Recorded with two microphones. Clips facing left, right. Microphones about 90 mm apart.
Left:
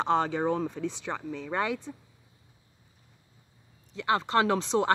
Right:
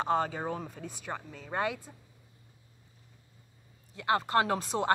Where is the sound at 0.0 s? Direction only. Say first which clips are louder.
Left 3 dB; 80° left.